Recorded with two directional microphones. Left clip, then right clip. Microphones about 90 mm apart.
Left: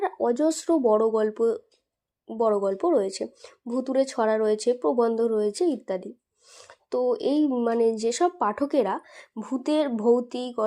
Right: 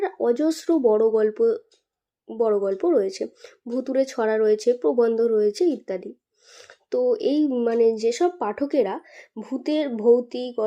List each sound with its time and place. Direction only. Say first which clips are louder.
0.0 s speech: right 2 dB; 10° left (ahead or behind); by 10.6 s 30° left (ahead or behind)